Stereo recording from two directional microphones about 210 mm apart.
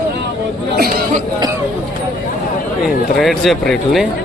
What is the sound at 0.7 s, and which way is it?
Speech, 45° right (ahead or behind).